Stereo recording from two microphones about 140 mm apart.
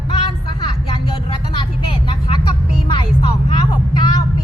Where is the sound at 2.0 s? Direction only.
35° left (ahead or behind).